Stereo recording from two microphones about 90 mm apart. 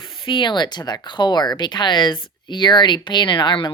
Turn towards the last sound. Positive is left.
turn(degrees=55)  # may be behind; listen again after turning